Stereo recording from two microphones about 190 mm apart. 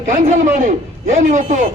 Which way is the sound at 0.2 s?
40° right (ahead or behind).